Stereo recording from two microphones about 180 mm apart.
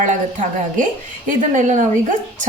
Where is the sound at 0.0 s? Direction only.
45° right (ahead or behind).